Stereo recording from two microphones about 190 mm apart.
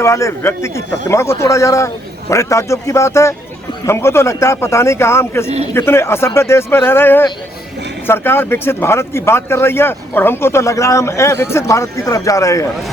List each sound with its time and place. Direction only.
0.0 s speech: 15° left (ahead or behind)